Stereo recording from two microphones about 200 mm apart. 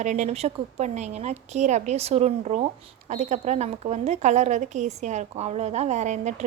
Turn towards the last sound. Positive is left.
turn(degrees=-35)  # may be behind; listen again after turning